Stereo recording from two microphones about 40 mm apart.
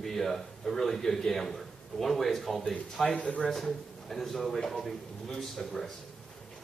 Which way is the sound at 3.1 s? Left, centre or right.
Left.